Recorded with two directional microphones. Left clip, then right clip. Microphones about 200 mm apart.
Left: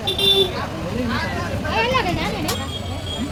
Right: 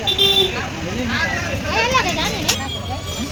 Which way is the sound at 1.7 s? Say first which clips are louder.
Right 2 dB; 45° right (ahead or behind).